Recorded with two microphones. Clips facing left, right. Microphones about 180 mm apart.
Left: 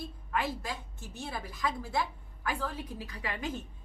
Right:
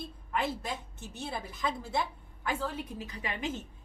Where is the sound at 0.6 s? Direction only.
20° right (ahead or behind).